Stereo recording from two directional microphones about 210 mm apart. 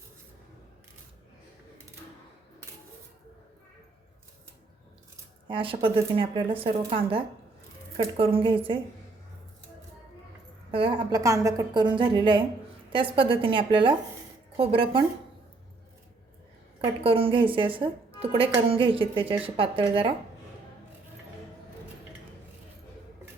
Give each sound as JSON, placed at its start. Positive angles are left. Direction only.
{"t": 5.5, "sound": "a woman's voice", "side_deg": -25}
{"t": 10.7, "sound": "a woman's voice", "side_deg": -25}
{"t": 16.8, "sound": "a woman's voice", "side_deg": -25}